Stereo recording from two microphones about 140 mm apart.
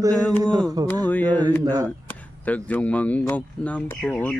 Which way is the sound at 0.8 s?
30° right (ahead or behind).